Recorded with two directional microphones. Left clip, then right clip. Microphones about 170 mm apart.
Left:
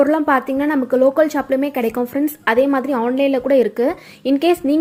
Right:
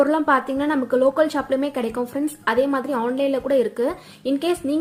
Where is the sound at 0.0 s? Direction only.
10° left (ahead or behind).